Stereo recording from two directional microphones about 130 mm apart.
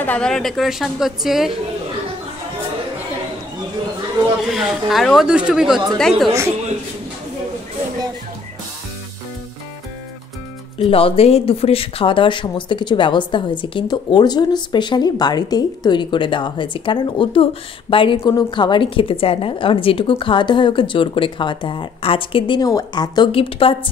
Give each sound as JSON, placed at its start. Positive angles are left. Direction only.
{"t": 0.0, "sound": "a woman's voice", "side_deg": 10}
{"t": 4.5, "sound": "a woman's voice", "side_deg": 0}
{"t": 10.8, "sound": "speech", "side_deg": 45}
{"t": 22.6, "sound": "speech", "side_deg": 30}